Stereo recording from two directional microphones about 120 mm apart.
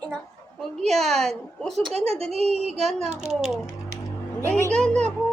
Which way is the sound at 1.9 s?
60° right (ahead or behind).